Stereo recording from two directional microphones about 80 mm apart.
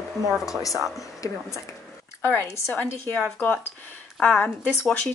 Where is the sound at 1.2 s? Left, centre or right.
Left.